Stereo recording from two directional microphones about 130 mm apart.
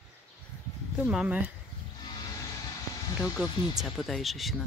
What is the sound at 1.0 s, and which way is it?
Speech, 5° right (ahead or behind).